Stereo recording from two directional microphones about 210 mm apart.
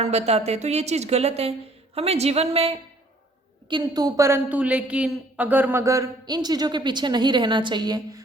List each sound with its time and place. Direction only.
0.0 s a woman's voice: 30° right (ahead or behind)